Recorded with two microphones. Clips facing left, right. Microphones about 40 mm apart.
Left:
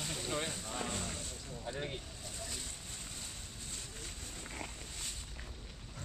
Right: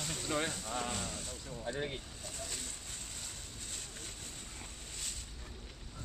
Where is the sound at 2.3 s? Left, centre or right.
Right.